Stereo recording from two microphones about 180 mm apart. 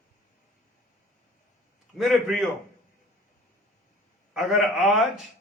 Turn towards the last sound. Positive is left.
turn(degrees=0)  # may be behind; listen again after turning